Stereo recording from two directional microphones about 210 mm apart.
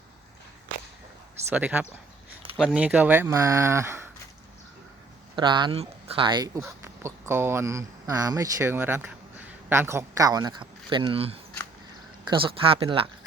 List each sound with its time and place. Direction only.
1.5 s speech: 5° right (ahead or behind)
5.4 s speech: 20° right (ahead or behind)